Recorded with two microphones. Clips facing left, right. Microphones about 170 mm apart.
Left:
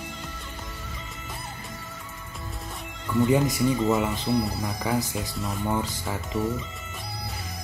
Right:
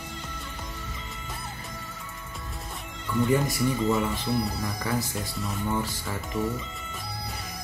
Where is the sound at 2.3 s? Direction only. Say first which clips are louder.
Left 2 dB; centre (ahead or behind).